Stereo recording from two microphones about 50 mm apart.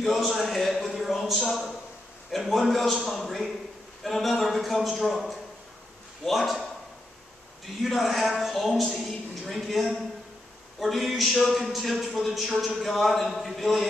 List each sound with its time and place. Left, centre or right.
0.0 s a man's voice: centre
6.2 s a man's voice: centre
7.8 s a man's voice: centre